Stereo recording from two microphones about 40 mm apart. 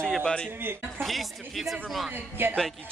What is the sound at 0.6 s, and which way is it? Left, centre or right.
Speech, right.